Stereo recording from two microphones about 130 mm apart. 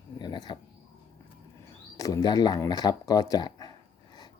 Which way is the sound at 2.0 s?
25° left (ahead or behind).